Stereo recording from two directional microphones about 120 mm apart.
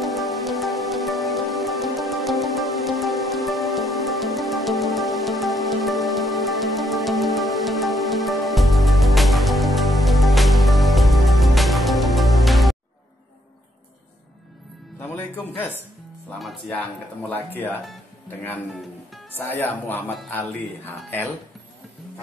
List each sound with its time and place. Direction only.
0.0 s music: centre (ahead or behind)
15.0 s music: 15° left (ahead or behind)
16.3 s music: centre (ahead or behind)
16.7 s a sound: 15° left (ahead or behind)
19.3 s speech: 15° left (ahead or behind)